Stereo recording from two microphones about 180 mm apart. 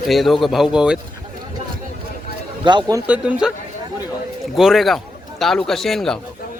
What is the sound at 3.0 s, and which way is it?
Speech, 10° right (ahead or behind).